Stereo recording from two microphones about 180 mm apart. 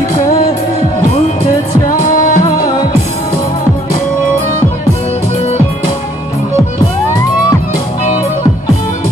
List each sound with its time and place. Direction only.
2.0 s music: 50° left (ahead or behind)